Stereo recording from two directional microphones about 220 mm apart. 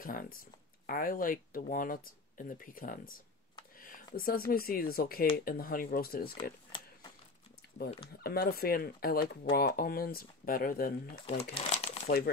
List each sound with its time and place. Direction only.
0.0 s speech: 40° left (ahead or behind)
6.7 s a sound: 25° left (ahead or behind)
8.2 s speech: 45° left (ahead or behind)
11.3 s speech: 30° left (ahead or behind)